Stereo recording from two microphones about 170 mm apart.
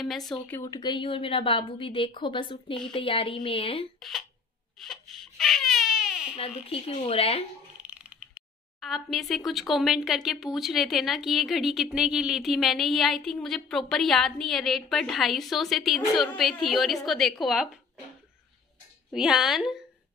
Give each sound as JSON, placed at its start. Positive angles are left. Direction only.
{"t": 0.0, "sound": "speech", "side_deg": 0}
{"t": 0.5, "sound": "a woman's voice", "side_deg": 20}
{"t": 4.7, "sound": "baby cry", "side_deg": 0}
{"t": 6.7, "sound": "a woman's voice", "side_deg": 35}
{"t": 7.8, "sound": "speech", "side_deg": -5}
{"t": 19.1, "sound": "speech", "side_deg": 0}